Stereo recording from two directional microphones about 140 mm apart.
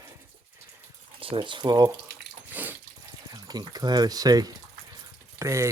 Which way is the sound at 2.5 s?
10° right (ahead or behind).